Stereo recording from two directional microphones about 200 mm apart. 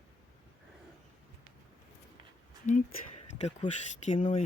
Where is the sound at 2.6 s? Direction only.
35° left (ahead or behind).